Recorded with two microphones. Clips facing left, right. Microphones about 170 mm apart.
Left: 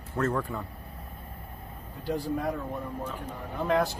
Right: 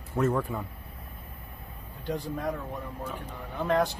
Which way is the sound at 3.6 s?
Centre (ahead or behind).